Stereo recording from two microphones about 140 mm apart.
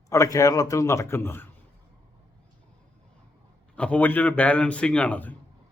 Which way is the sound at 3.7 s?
10° left (ahead or behind).